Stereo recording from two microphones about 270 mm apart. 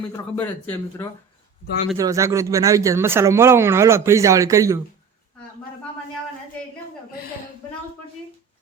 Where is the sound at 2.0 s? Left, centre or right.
Centre.